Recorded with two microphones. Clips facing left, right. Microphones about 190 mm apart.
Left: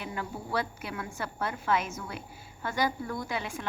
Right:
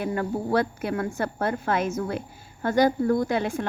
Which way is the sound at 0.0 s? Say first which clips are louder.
Right 10 dB; 50° right (ahead or behind).